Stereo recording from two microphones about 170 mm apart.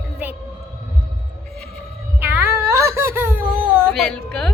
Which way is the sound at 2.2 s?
10° right (ahead or behind).